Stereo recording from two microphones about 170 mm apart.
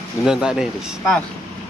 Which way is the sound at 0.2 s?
5° right (ahead or behind).